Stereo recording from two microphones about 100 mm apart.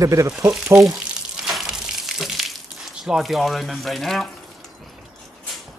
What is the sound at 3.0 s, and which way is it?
Speech, 5° right (ahead or behind).